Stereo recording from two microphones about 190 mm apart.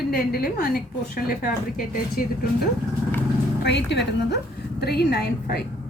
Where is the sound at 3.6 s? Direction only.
65° left (ahead or behind).